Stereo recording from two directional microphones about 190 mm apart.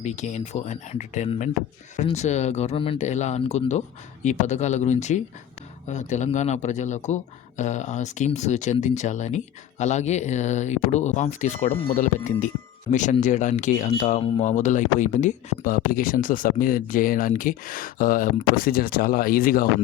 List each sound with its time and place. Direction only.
0.0 s speech: 40° left (ahead or behind)